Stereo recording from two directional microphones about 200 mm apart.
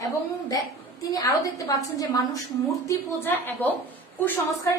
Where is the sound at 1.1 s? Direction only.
15° left (ahead or behind).